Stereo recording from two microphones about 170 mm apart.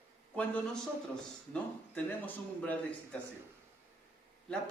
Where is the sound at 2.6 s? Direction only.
10° left (ahead or behind).